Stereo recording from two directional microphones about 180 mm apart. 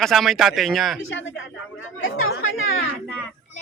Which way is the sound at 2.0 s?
90° left.